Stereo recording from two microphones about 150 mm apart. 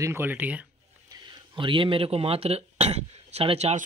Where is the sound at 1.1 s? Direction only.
30° right (ahead or behind).